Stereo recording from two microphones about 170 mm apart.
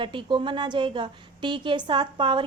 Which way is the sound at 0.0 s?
30° right (ahead or behind).